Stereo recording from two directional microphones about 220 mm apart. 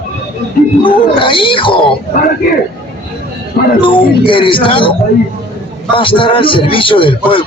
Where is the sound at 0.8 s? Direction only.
25° left (ahead or behind).